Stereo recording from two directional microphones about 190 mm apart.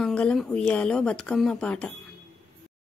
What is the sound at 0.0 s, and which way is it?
Speech, 5° left (ahead or behind).